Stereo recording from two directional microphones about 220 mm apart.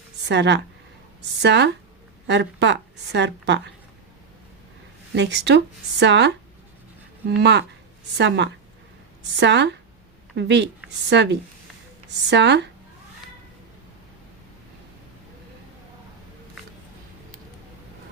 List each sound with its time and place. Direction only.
0.3 s a woman's voice: 50° right (ahead or behind)
5.1 s a woman's voice: 50° right (ahead or behind)
9.3 s a woman's voice: 50° right (ahead or behind)